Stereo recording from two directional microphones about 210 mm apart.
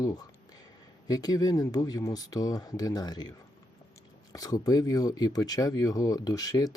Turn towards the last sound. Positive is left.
turn(degrees=15)  # may be behind; listen again after turning